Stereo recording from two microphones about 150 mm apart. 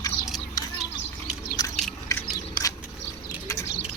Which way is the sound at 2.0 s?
20° left (ahead or behind).